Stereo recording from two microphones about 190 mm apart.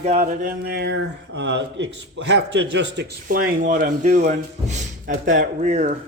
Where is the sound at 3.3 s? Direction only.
45° right (ahead or behind).